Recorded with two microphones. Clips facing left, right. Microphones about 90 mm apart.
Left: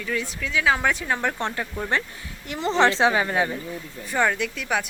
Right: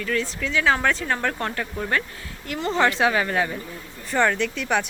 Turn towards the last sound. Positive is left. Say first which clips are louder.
# right 2 dB
turn(degrees=5)  # may be behind; listen again after turning